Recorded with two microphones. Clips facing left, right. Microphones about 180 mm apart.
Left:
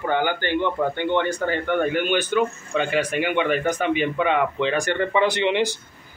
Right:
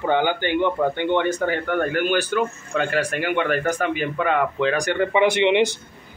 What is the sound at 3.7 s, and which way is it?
Speech, centre (ahead or behind).